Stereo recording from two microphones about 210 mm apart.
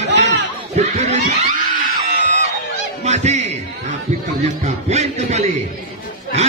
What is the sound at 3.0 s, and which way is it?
A man's voice, 30° right (ahead or behind).